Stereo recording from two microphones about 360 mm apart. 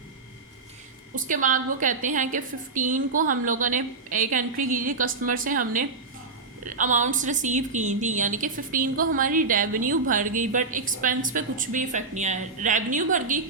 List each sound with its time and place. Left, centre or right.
1.1 s a woman's voice: right